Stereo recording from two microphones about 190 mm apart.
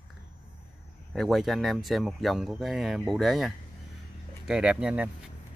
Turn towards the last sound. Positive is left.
turn(degrees=-5)  # may be behind; listen again after turning